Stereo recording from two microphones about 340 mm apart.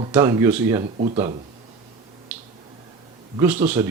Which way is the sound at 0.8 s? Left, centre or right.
Centre.